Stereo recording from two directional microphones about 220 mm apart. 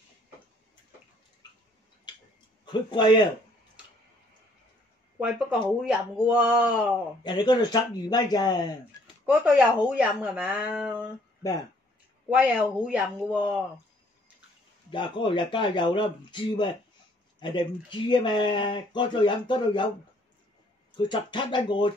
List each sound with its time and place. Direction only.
2.6 s speech: 20° left (ahead or behind)
5.2 s speech: centre (ahead or behind)
7.2 s speech: 20° left (ahead or behind)
9.2 s speech: 5° right (ahead or behind)
12.3 s speech: 5° right (ahead or behind)
14.9 s speech: 20° left (ahead or behind)
20.9 s speech: 20° left (ahead or behind)